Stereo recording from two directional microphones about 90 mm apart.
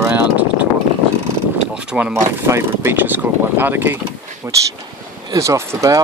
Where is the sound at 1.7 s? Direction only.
10° right (ahead or behind).